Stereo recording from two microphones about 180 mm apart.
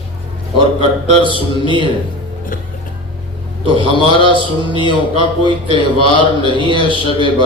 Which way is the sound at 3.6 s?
30° right (ahead or behind).